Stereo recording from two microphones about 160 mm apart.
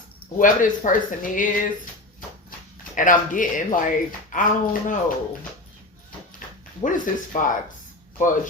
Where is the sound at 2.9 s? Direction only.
55° left (ahead or behind).